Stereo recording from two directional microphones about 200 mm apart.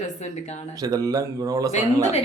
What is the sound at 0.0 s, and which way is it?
Speech, 35° left (ahead or behind).